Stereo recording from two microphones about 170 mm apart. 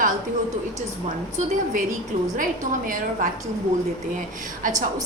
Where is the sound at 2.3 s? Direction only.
50° right (ahead or behind).